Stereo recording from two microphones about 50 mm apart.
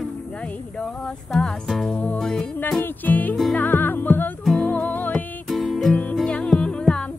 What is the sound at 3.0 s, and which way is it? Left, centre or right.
Music, left.